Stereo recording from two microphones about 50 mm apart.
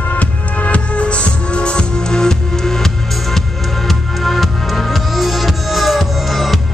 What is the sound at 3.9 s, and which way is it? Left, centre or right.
Music, centre.